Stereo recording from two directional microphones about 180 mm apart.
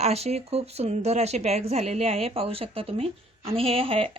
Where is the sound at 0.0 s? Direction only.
35° right (ahead or behind).